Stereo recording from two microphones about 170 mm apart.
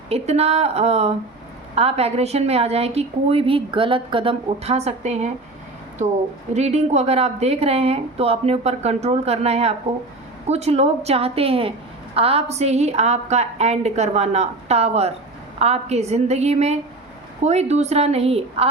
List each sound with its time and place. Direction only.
0.1 s a woman's voice: 40° right (ahead or behind)
6.5 s a woman's voice: 40° right (ahead or behind)